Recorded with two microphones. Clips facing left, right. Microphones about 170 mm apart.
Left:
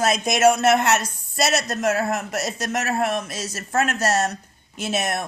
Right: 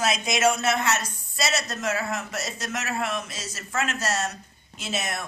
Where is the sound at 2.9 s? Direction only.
50° left (ahead or behind).